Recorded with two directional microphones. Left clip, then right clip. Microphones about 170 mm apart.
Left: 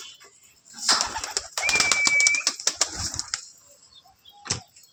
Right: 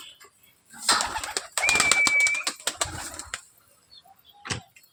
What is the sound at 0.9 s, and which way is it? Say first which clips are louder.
Pigeon: even; 65° right (ahead or behind).